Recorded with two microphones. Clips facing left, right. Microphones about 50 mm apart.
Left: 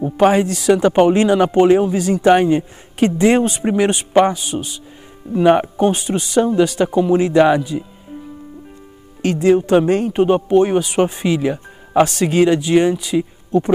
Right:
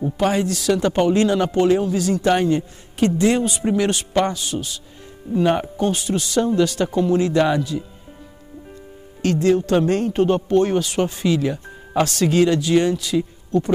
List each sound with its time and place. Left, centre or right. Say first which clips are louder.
0.0 s speech: left 6 dB; left
9.2 s speech: left 3 dB; centre